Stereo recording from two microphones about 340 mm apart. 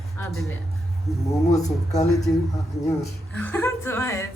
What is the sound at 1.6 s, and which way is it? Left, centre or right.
Speech, centre.